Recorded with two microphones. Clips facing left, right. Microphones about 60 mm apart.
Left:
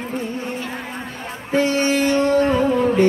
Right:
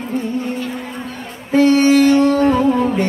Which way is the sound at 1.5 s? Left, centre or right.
Centre.